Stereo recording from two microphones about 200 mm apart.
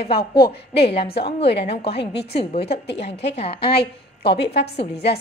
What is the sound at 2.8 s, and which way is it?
Speech, 60° left (ahead or behind).